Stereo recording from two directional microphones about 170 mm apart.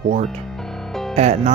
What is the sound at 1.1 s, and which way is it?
Music, 40° right (ahead or behind).